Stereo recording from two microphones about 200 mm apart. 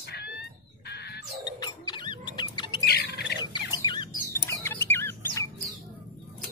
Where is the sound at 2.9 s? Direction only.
50° left (ahead or behind).